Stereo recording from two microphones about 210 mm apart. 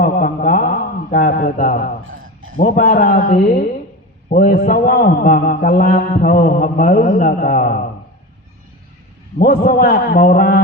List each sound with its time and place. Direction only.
0.0 s a sound: 40° left (ahead or behind)
2.6 s a man's voice: 35° left (ahead or behind)
9.4 s a man's voice: 40° left (ahead or behind)